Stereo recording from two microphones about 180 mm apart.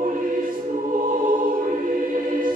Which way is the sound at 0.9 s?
45° right (ahead or behind).